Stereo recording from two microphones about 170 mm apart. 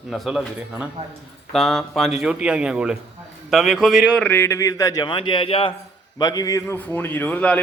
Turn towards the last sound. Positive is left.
turn(degrees=10)  # may be behind; listen again after turning